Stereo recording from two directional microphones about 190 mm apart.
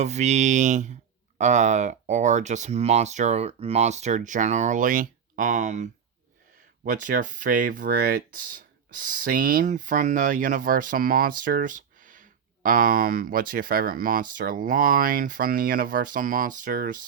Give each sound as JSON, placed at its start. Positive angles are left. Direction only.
{"t": 0.0, "sound": "speech", "side_deg": -35}
{"t": 9.0, "sound": "speech", "side_deg": -45}